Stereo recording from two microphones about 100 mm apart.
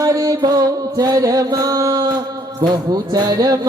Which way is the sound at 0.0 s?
40° right (ahead or behind).